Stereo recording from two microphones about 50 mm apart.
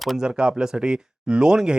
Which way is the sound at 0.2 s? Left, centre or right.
Centre.